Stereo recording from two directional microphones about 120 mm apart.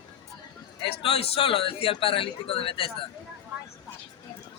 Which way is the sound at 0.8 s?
50° left (ahead or behind).